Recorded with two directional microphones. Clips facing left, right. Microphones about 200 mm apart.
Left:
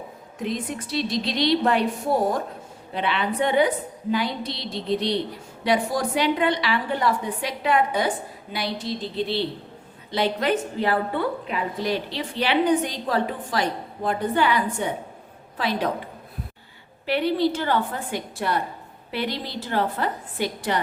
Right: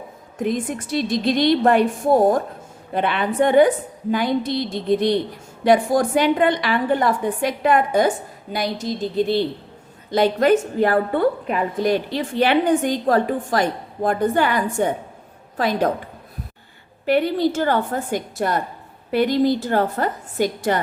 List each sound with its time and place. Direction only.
0.3 s a woman's voice: 50° right (ahead or behind)
17.1 s a woman's voice: 45° right (ahead or behind)